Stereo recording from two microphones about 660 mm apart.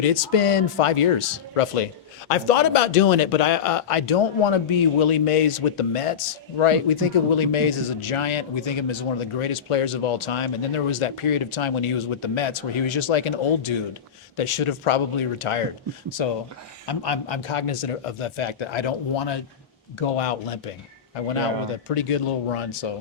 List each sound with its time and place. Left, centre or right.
0.0 s speech: left
20.0 s speech: left
21.8 s speech: left